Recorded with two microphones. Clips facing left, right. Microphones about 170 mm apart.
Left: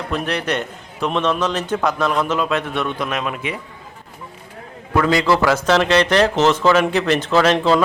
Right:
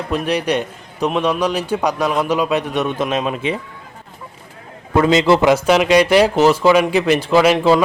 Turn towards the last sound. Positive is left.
turn(degrees=-10)  # may be behind; listen again after turning